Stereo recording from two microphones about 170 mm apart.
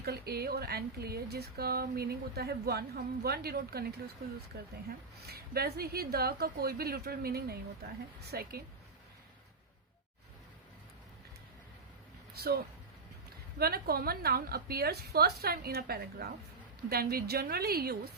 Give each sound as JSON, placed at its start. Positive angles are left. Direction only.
{"t": 0.0, "sound": "a woman's voice", "side_deg": -70}
{"t": 12.4, "sound": "a woman's voice", "side_deg": -65}